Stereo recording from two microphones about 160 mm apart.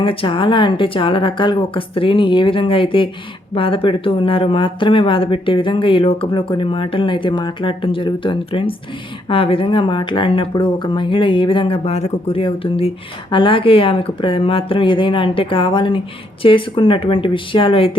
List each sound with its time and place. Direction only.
0.0 s speech: 35° left (ahead or behind)